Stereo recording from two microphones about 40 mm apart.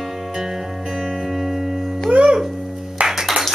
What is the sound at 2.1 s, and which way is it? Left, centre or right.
Music, right.